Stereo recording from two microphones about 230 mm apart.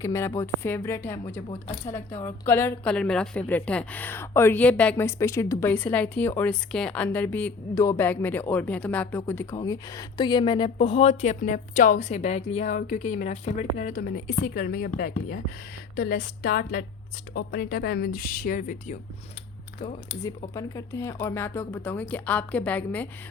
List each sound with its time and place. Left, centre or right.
0.0 s a woman's voice: centre; by 18.9 s left
20.5 s a woman's voice: centre